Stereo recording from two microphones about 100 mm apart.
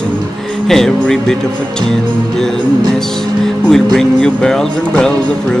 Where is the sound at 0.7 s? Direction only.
5° left (ahead or behind).